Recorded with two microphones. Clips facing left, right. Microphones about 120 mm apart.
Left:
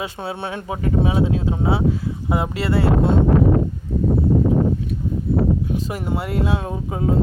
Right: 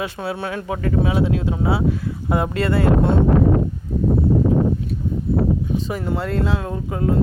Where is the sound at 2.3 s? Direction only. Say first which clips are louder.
Right 2 dB; 20° left (ahead or behind).